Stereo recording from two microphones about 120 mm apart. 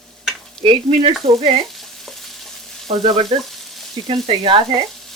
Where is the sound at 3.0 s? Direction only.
50° right (ahead or behind).